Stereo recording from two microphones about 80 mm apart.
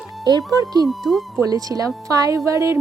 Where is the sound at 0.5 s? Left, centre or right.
Right.